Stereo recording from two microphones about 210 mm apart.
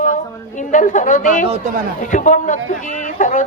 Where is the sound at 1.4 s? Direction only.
30° right (ahead or behind).